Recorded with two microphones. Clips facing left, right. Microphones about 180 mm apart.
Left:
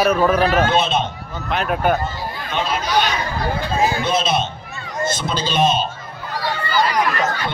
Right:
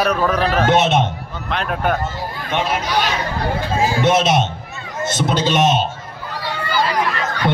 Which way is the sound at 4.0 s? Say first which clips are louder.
Right 4 dB; 80° right.